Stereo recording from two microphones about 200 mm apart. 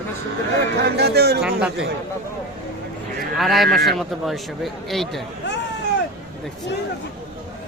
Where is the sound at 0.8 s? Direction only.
55° right (ahead or behind).